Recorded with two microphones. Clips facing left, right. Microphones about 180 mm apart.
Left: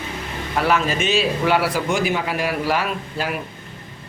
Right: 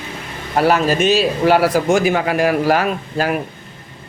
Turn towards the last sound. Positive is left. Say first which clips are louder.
# right 6 dB
turn(degrees=-45)  # may be behind; listen again after turning